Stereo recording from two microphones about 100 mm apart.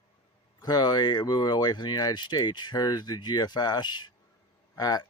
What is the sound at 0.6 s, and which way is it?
Speech, 45° left (ahead or behind).